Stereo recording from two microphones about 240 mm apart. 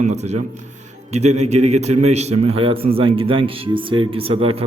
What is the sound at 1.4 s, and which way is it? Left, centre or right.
A man's voice, right.